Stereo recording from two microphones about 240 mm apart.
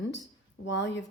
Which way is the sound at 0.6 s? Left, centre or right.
Left.